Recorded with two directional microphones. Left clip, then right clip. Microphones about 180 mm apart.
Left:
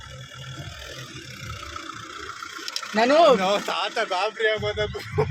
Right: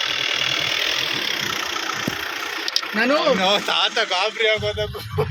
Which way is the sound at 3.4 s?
5° left (ahead or behind).